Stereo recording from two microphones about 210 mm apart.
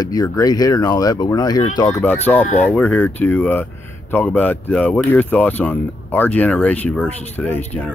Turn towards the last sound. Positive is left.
turn(degrees=10)  # may be behind; listen again after turning